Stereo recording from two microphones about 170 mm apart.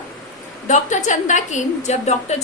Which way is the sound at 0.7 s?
45° left (ahead or behind).